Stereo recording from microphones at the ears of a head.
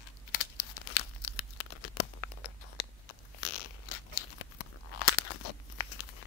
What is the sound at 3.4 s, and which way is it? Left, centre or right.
Crunch, left.